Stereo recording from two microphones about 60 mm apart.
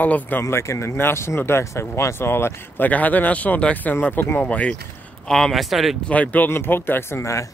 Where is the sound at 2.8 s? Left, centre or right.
Left.